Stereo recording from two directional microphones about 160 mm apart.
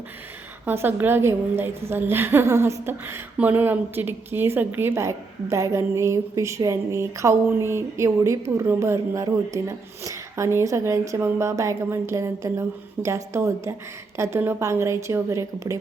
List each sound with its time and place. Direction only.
0.6 s a woman's voice: 15° right (ahead or behind)